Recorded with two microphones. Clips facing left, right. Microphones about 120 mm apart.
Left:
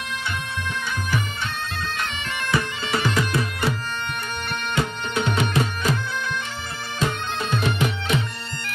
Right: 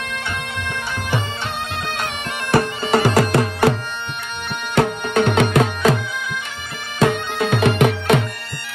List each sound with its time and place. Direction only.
2.5 s bagpipes: 65° right (ahead or behind)
3.2 s music: 75° right (ahead or behind)
4.7 s music: 65° right (ahead or behind)
7.0 s bagpipes: 70° right (ahead or behind)